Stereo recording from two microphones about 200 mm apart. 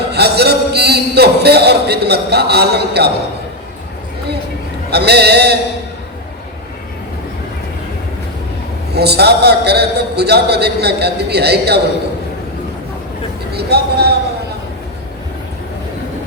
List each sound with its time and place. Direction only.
0.1 s a man's voice: 55° right (ahead or behind)
4.9 s a man's voice: 55° right (ahead or behind)
9.0 s a man's voice: 55° right (ahead or behind)
13.5 s speech: 55° right (ahead or behind)